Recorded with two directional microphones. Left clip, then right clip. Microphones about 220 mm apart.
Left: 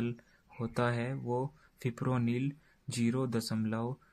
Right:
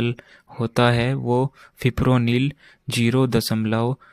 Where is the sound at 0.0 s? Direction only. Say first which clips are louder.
Right 13 dB; 40° right (ahead or behind).